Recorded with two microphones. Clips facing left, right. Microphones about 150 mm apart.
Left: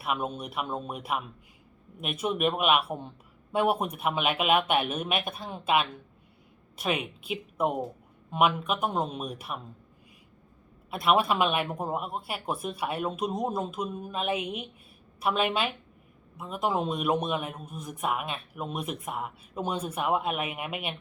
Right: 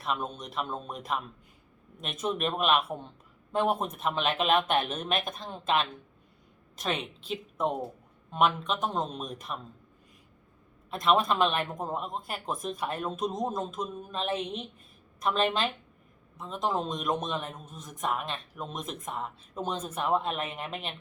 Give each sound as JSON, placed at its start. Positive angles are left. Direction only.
{"t": 0.0, "sound": "a man's voice", "side_deg": 10}
{"t": 10.9, "sound": "a man's voice", "side_deg": 10}